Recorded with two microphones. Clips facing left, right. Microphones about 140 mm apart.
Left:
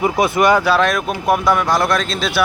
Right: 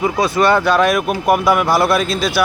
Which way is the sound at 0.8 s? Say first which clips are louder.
Right 3 dB; 5° right (ahead or behind).